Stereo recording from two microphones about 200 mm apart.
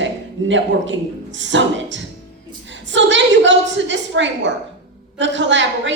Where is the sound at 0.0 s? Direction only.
65° right (ahead or behind).